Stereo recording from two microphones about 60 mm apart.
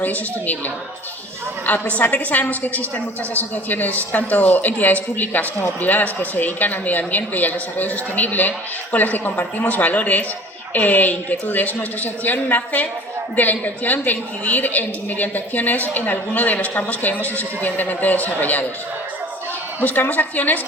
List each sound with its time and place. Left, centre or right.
0.0 s a woman's voice: left
19.8 s a woman's voice: left